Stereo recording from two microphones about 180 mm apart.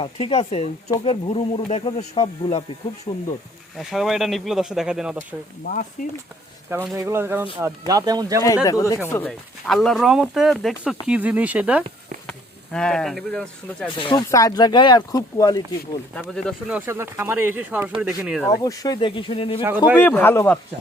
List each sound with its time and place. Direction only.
0.0 s speech: 30° left (ahead or behind)
3.8 s speech: centre (ahead or behind)
5.6 s speech: 50° left (ahead or behind)
6.7 s speech: 10° right (ahead or behind)
8.6 s speech: 20° left (ahead or behind)
9.6 s speech: centre (ahead or behind)
12.2 s speech: 5° left (ahead or behind)
14.0 s speech: 25° left (ahead or behind)
16.1 s speech: 5° left (ahead or behind)
16.7 s speech: 10° right (ahead or behind)
18.6 s speech: 20° left (ahead or behind)
19.6 s speech: 10° right (ahead or behind)
20.0 s speech: 10° left (ahead or behind)